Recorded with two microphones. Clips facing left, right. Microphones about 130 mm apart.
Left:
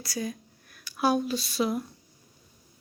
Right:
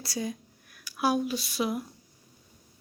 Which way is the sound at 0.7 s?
10° right (ahead or behind).